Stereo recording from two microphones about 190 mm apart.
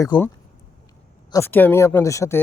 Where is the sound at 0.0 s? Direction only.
15° left (ahead or behind).